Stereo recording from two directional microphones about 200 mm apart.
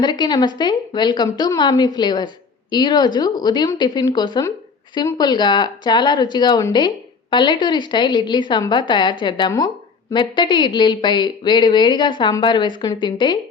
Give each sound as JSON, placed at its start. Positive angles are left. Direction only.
{"t": 0.0, "sound": "speech", "side_deg": 20}